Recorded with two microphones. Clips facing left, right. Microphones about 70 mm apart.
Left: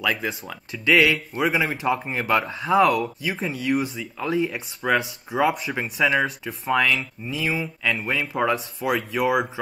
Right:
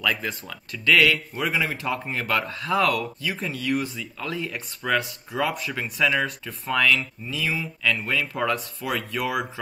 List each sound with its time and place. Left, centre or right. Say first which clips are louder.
0.0 s speech: left 1 dB; centre
1.1 s a man's voice: left 4 dB; centre
1.5 s speech: left 2 dB; centre